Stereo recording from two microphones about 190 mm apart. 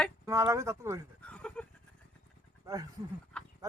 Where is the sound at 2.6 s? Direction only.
20° right (ahead or behind).